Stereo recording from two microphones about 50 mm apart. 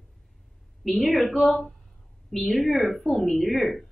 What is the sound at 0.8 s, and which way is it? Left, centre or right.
A woman's voice, centre.